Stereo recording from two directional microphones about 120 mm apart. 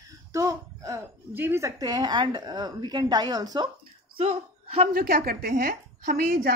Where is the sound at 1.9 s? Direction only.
40° right (ahead or behind).